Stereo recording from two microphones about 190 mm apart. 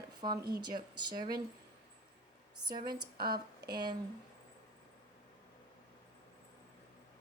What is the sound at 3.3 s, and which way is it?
Speech, 55° right (ahead or behind).